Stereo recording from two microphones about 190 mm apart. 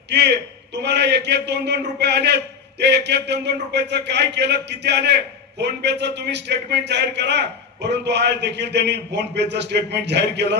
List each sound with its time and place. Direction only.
0.1 s a man's voice: 60° right (ahead or behind)